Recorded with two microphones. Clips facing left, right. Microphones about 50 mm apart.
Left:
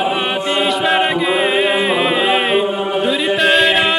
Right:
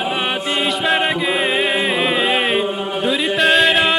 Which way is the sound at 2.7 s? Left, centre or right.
Centre.